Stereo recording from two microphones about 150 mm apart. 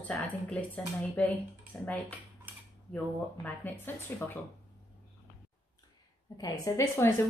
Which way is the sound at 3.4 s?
10° left (ahead or behind).